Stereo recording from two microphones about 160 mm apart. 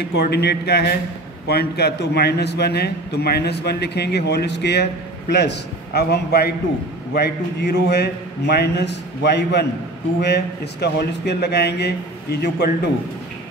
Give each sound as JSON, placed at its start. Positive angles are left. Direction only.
{"t": 0.0, "sound": "a man's voice", "side_deg": 90}